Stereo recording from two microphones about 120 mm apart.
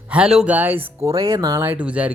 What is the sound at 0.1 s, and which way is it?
Speech, 5° right (ahead or behind).